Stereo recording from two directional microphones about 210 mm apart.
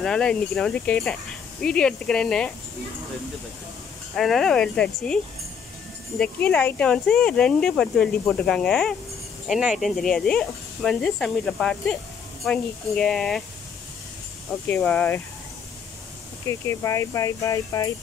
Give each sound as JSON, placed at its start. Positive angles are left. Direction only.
{"t": 0.0, "sound": "speech", "side_deg": 5}
{"t": 4.1, "sound": "speech", "side_deg": 0}
{"t": 14.7, "sound": "speech", "side_deg": 5}
{"t": 16.4, "sound": "speech", "side_deg": 15}